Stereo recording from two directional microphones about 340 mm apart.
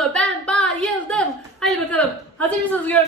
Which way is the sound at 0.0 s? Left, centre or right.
Centre.